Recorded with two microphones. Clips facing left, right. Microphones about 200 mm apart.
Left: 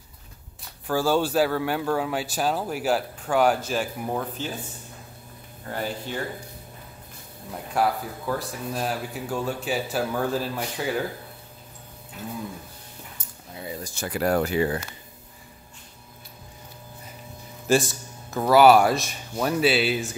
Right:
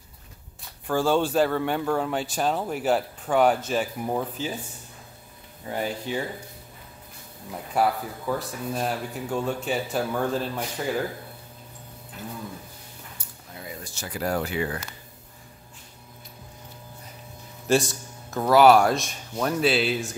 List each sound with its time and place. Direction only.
0.8 s speech: 5° left (ahead or behind)
5.7 s speech: 5° right (ahead or behind)
7.5 s speech: centre (ahead or behind)
13.8 s speech: 55° left (ahead or behind)
14.4 s speech: 35° left (ahead or behind)
17.6 s speech: centre (ahead or behind)